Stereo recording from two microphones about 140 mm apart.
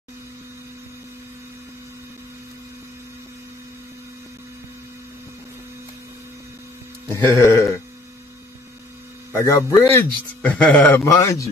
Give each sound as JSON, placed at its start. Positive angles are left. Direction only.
{"t": 7.2, "sound": "a man's voice", "side_deg": 15}
{"t": 9.3, "sound": "a man's voice", "side_deg": 20}
{"t": 11.1, "sound": "speech", "side_deg": 20}